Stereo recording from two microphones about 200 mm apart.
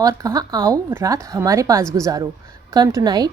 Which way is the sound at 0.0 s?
15° right (ahead or behind).